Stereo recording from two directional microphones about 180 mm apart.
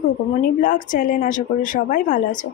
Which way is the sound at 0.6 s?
50° left (ahead or behind).